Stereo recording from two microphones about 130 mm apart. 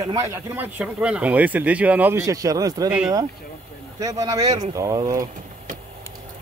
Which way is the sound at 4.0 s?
30° right (ahead or behind).